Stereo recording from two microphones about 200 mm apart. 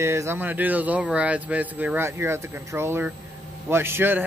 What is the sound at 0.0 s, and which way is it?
A man's voice, 15° right (ahead or behind).